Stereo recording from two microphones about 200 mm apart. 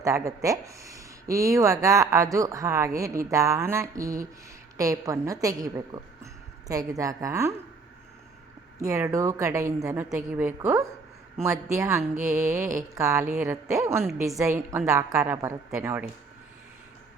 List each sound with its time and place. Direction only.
0.0 s speech: 15° right (ahead or behind)
8.8 s speech: 15° right (ahead or behind)